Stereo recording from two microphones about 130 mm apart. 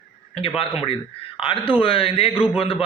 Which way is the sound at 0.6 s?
45° left (ahead or behind).